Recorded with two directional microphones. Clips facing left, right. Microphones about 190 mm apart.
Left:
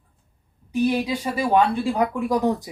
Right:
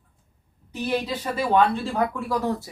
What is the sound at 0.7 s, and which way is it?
Speech, 10° left (ahead or behind).